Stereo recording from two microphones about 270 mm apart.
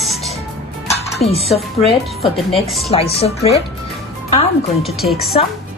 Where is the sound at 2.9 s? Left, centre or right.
Left.